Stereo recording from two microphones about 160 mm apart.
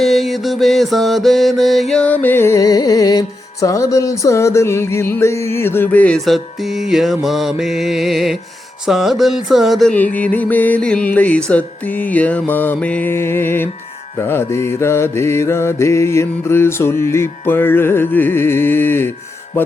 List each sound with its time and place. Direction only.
0.0 s mantra: centre (ahead or behind)